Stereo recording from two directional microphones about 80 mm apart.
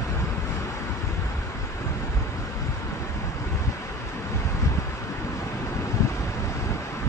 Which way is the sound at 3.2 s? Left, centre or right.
Left.